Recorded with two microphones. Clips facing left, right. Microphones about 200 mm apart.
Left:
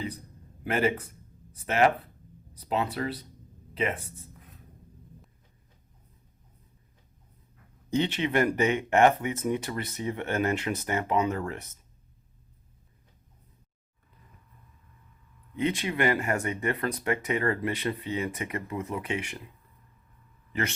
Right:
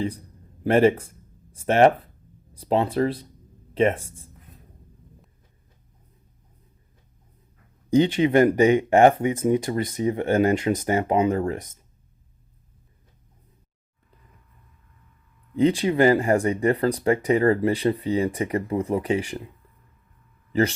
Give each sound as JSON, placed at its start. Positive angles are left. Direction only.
{"t": 0.6, "sound": "speech", "side_deg": -30}
{"t": 4.0, "sound": "speech", "side_deg": -10}
{"t": 7.9, "sound": "speech", "side_deg": -35}
{"t": 15.5, "sound": "speech", "side_deg": -35}
{"t": 20.5, "sound": "speech", "side_deg": -35}